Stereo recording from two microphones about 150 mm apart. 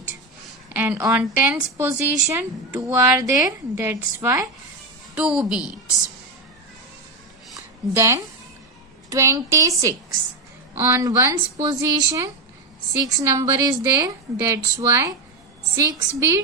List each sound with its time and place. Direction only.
0.7 s a woman's voice: 10° right (ahead or behind)
7.5 s a sound: 20° right (ahead or behind)
9.0 s speech: 20° right (ahead or behind)